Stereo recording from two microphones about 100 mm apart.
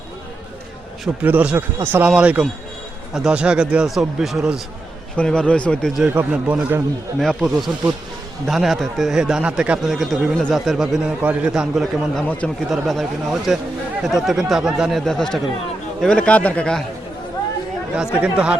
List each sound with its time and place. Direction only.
1.2 s a man's voice: 15° right (ahead or behind)
5.1 s a man's voice: 10° left (ahead or behind)
6.1 s a man's voice: 15° right (ahead or behind)
7.2 s speech: centre (ahead or behind)
12.2 s a man's voice: 15° left (ahead or behind)
12.7 s a man's voice: centre (ahead or behind)
17.9 s a man's voice: 10° right (ahead or behind)